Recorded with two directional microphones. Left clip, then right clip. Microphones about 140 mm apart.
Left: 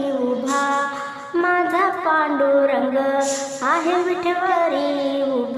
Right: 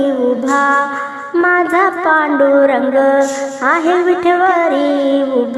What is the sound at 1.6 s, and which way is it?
Music, 40° right (ahead or behind).